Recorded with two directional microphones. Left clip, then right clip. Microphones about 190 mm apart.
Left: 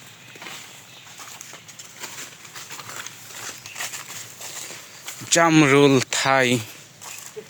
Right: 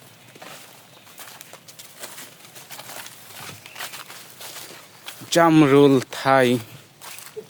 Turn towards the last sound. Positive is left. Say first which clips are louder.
# right 1 dB
turn(degrees=-10)  # may be behind; listen again after turning